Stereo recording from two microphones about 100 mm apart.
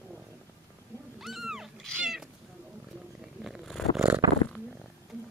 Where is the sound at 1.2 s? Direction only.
Centre (ahead or behind).